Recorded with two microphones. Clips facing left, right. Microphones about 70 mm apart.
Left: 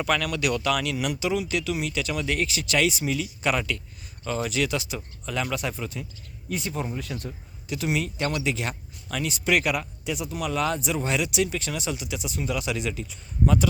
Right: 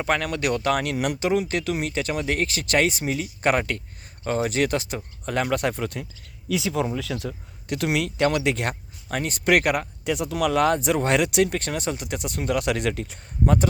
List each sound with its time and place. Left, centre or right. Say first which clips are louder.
0.0 s speech: right 1 dB; right
6.5 s speech: right 6 dB; right
7.7 s speech: right 3 dB; right
13.4 s speech: right 1 dB; right